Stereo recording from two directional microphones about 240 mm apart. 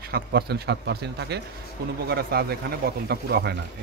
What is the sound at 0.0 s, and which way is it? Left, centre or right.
Speech, right.